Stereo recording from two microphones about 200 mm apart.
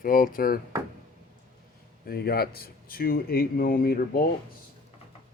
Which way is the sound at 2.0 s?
50° left (ahead or behind).